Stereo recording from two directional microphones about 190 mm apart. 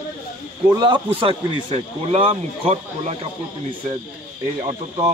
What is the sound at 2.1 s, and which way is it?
Speech, 30° right (ahead or behind).